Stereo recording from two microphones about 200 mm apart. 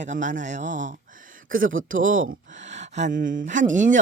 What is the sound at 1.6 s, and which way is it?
Speech, 80° right.